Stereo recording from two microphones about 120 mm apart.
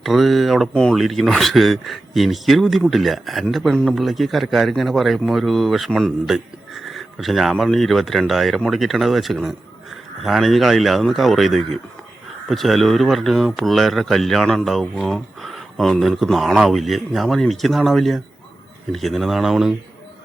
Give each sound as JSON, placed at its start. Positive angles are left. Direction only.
{"t": 0.0, "sound": "speech", "side_deg": 0}